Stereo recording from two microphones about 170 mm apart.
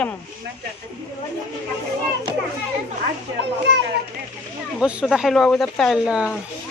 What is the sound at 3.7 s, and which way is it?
Speech, 85° right.